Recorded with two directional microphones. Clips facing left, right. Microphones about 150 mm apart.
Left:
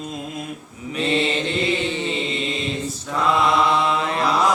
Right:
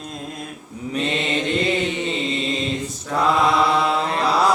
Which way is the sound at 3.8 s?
35° right (ahead or behind).